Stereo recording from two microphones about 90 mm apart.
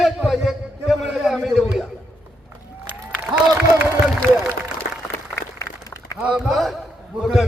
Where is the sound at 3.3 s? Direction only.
60° right (ahead or behind).